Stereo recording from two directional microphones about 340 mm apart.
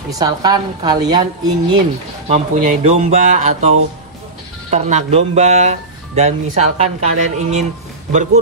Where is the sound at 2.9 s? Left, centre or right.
Right.